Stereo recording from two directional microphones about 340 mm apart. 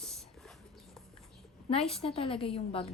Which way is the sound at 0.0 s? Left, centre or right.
Centre.